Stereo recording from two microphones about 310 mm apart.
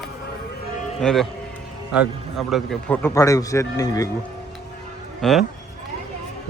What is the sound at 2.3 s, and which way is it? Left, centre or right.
Speech, centre.